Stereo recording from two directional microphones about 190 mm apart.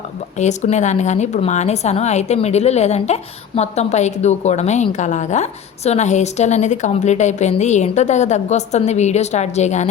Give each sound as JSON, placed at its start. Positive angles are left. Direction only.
{"t": 0.3, "sound": "a woman's voice", "side_deg": 35}